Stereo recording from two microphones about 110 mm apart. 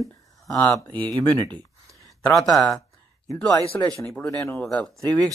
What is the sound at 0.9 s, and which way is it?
Speech, 15° left (ahead or behind).